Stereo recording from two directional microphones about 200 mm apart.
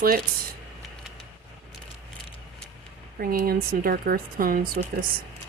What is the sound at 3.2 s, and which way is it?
Speech, 50° right (ahead or behind).